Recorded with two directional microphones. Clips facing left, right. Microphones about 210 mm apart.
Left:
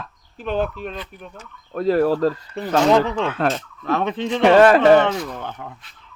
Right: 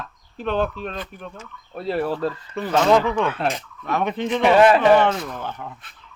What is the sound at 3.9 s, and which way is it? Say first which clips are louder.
Fowl: left 2 dB; 25° left (ahead or behind).